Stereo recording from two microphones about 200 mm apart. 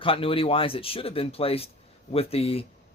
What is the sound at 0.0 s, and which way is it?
Speech, 25° left (ahead or behind).